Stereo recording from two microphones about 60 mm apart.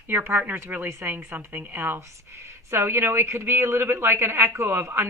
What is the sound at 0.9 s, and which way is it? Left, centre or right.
Speech, right.